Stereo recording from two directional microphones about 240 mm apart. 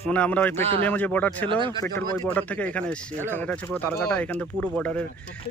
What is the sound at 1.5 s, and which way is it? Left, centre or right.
Speech, right.